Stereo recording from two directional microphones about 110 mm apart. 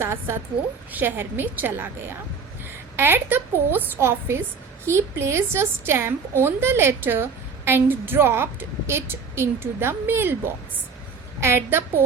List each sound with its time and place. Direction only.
0.0 s a woman's voice: 25° right (ahead or behind)
11.3 s a woman's voice: 25° right (ahead or behind)